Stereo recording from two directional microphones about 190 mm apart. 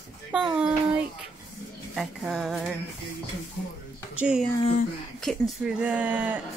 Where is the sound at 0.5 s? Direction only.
5° right (ahead or behind).